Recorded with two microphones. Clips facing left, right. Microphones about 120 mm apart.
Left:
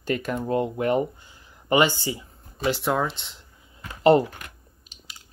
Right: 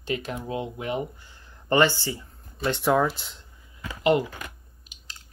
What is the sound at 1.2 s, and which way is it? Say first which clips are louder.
Speech: even; 10° left (ahead or behind).